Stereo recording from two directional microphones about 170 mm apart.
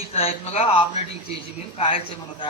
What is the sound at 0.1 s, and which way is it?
Speech, 40° left (ahead or behind).